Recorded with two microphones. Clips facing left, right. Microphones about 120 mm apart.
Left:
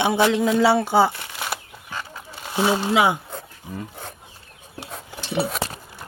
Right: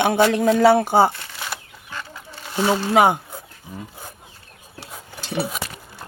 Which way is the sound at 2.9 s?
50° right (ahead or behind).